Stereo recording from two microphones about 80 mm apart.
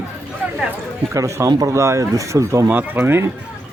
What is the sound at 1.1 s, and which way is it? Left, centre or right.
Speech, right.